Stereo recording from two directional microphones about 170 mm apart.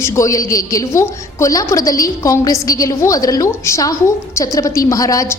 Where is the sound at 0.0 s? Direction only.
15° left (ahead or behind).